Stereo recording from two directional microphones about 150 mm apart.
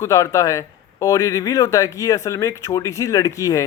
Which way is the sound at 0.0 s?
20° left (ahead or behind).